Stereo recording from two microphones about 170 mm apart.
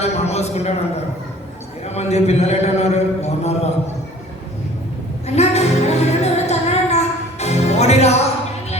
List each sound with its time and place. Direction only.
0.0 s a man's voice: 40° left (ahead or behind)
1.9 s a man's voice: 40° left (ahead or behind)
5.2 s music: 40° left (ahead or behind)